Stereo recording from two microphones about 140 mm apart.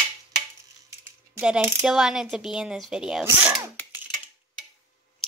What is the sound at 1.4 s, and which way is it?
Mechanisms, 5° right (ahead or behind).